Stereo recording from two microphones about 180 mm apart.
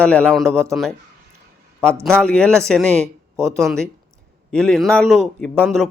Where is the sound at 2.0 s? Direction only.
5° left (ahead or behind).